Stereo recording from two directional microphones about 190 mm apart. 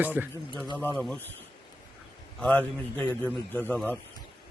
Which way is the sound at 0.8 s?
10° left (ahead or behind).